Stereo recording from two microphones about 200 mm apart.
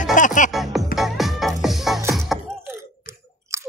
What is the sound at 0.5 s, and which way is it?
Music, centre (ahead or behind).